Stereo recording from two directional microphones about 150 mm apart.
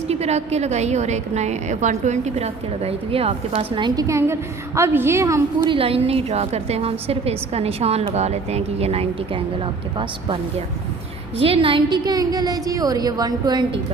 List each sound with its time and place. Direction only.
0.1 s a woman's voice: 45° right (ahead or behind); by 5.4 s 20° right (ahead or behind)
5.6 s a woman's voice: 35° right (ahead or behind)
11.3 s a woman's voice: 35° right (ahead or behind)